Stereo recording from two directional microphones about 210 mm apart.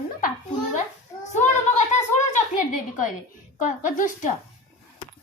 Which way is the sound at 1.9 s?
35° left (ahead or behind).